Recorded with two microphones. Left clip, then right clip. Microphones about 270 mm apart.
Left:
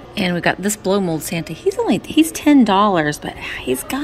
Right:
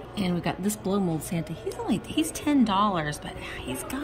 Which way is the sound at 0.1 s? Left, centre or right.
Centre.